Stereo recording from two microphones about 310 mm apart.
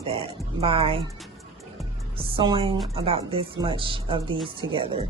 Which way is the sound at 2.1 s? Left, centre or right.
Centre.